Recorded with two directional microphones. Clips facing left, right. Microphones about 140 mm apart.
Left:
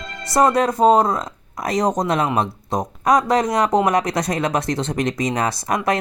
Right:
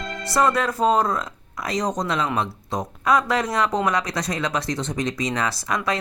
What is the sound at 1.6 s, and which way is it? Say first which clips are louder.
Speech: left 5 dB; 50° left (ahead or behind).